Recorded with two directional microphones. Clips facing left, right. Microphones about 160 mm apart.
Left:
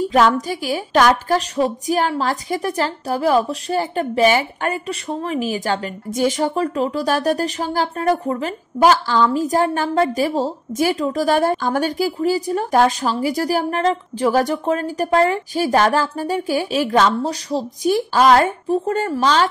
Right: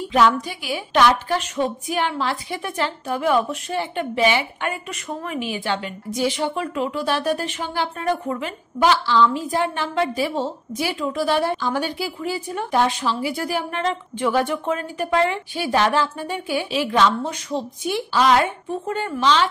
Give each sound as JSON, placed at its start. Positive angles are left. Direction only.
{"t": 0.0, "sound": "a woman's voice", "side_deg": 40}